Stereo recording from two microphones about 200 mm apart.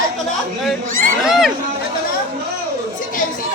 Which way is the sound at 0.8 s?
40° right (ahead or behind).